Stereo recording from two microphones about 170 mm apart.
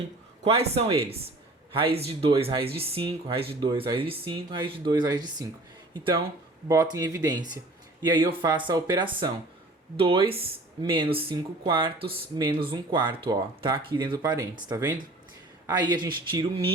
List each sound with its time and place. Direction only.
0.4 s speech: 35° right (ahead or behind)
6.7 s speech: 20° right (ahead or behind)